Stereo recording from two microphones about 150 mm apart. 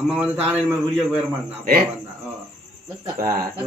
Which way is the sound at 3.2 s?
75° right (ahead or behind).